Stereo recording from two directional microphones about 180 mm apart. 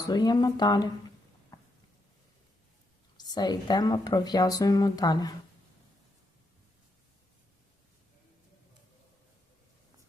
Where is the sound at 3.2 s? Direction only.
20° left (ahead or behind).